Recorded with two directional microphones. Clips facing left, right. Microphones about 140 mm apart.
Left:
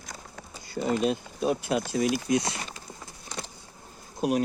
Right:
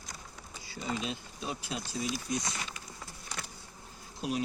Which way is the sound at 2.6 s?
35° left (ahead or behind).